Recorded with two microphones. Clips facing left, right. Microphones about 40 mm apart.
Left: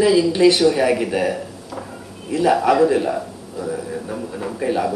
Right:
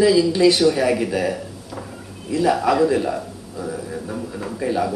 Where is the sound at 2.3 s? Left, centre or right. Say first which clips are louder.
Left 2 dB; left.